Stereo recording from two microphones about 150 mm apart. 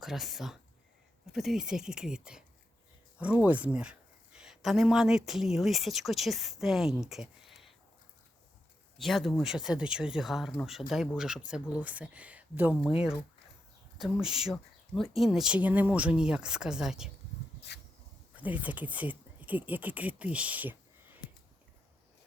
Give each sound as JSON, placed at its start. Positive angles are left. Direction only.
{"t": 0.0, "sound": "speech", "side_deg": 0}
{"t": 9.0, "sound": "speech", "side_deg": 0}
{"t": 14.0, "sound": "speech", "side_deg": -5}
{"t": 17.7, "sound": "dog", "side_deg": 90}
{"t": 18.3, "sound": "speech", "side_deg": -10}